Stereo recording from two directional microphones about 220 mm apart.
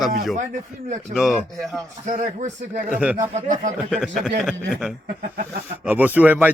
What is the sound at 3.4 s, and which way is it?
Speech, 35° right (ahead or behind).